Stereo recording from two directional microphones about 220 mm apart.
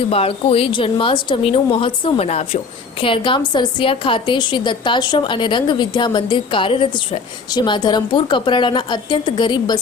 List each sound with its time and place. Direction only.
0.1 s a woman's voice: 25° left (ahead or behind)